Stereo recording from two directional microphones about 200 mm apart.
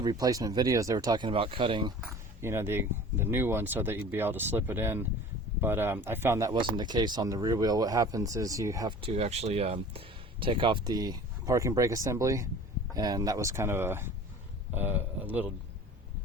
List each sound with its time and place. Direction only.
0.0 s speech: 20° right (ahead or behind)
2.0 s speech: 10° right (ahead or behind)